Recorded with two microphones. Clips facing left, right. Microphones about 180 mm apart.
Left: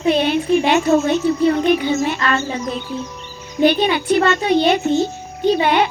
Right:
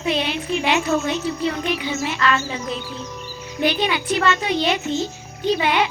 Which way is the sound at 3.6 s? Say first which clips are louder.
Left 6 dB; 55° left (ahead or behind).